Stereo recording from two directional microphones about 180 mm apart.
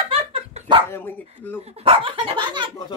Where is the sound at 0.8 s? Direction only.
10° left (ahead or behind).